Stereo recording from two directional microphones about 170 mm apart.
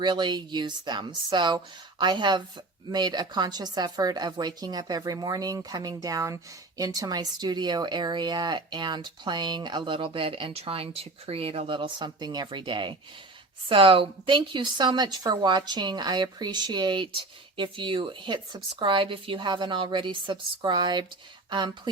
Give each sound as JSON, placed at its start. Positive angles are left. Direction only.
{"t": 0.0, "sound": "speech", "side_deg": -25}